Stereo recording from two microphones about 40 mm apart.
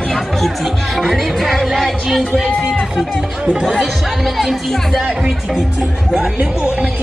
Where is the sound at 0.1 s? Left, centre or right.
Centre.